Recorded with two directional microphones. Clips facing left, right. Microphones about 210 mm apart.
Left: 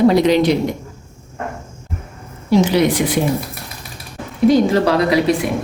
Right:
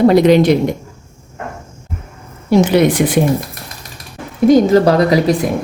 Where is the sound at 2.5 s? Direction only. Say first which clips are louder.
Right 3 dB; 55° right (ahead or behind).